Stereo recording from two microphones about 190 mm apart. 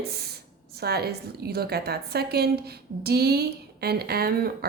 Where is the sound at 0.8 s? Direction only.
55° right (ahead or behind).